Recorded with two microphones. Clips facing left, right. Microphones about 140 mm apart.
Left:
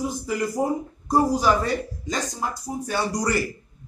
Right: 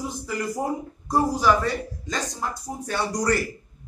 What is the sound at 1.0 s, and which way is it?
Speech, 15° left (ahead or behind).